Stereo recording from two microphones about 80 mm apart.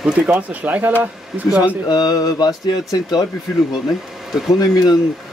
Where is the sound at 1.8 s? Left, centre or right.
Left.